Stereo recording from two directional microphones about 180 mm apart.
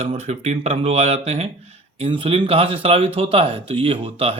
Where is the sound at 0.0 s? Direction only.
35° right (ahead or behind).